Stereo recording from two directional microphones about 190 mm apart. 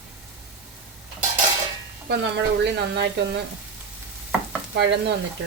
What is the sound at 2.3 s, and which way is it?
Speech, 65° right (ahead or behind).